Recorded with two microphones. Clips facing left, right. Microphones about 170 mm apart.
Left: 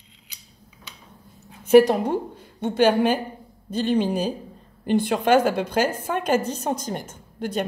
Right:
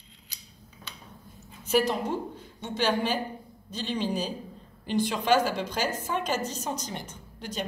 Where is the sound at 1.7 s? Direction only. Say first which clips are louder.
Left 11 dB; 60° left (ahead or behind).